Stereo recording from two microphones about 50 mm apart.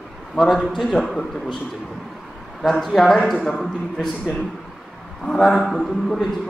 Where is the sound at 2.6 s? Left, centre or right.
Centre.